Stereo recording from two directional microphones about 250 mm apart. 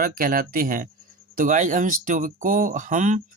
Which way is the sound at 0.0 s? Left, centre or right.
Right.